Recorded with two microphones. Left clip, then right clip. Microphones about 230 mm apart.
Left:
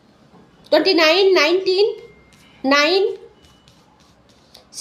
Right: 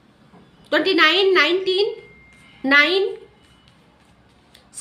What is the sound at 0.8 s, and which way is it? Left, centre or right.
A woman's voice, centre.